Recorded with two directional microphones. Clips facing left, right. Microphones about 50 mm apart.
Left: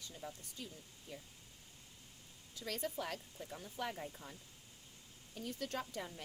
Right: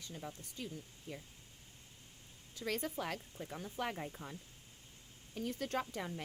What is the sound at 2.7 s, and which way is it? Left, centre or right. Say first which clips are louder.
Speech: right 3 dB; right.